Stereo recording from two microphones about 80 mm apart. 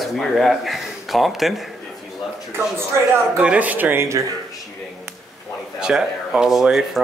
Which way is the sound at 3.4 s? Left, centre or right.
Centre.